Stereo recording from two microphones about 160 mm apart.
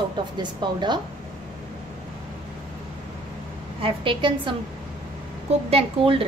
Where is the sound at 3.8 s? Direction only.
35° right (ahead or behind).